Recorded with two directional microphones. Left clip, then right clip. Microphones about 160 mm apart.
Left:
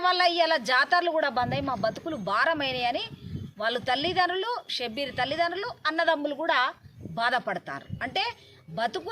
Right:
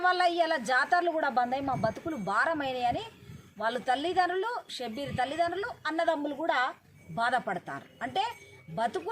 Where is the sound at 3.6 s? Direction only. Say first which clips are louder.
Left 3 dB; 25° left (ahead or behind).